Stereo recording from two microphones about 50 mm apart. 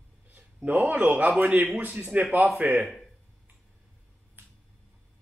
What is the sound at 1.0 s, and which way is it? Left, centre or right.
A man's voice, right.